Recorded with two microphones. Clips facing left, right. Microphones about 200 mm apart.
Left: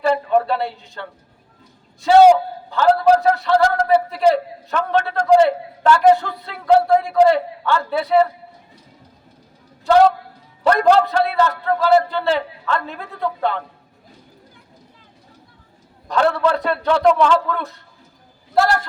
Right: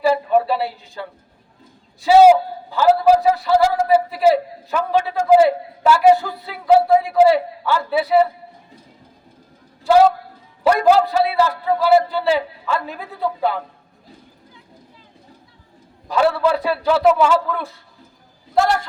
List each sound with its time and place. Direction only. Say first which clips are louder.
0.0 s a man's voice: right 1 dB; 5° right (ahead or behind)
2.0 s a man's voice: even; 5° right (ahead or behind)
9.8 s a man's voice: even; 5° right (ahead or behind)
16.0 s a man's voice: right 1 dB; 5° right (ahead or behind)